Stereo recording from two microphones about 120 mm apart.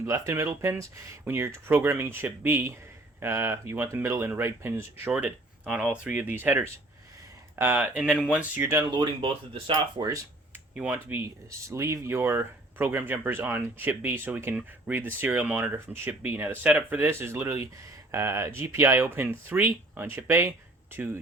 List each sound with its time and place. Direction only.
0.0 s speech: 25° right (ahead or behind)
7.9 s speech: 5° right (ahead or behind)
8.9 s speech: 45° right (ahead or behind)
10.8 s speech: 15° right (ahead or behind)